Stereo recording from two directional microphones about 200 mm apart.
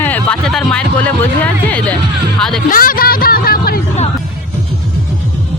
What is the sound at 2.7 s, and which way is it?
Speech, 45° left (ahead or behind).